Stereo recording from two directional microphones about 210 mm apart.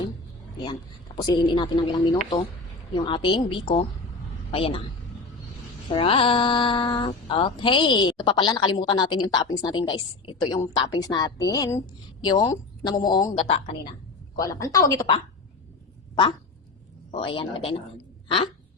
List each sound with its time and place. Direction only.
0.6 s speech: 20° left (ahead or behind)
5.9 s speech: 25° left (ahead or behind)
17.1 s speech: 25° left (ahead or behind)